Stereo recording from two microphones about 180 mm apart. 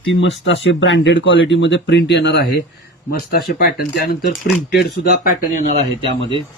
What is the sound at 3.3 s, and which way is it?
Speech, 55° left (ahead or behind).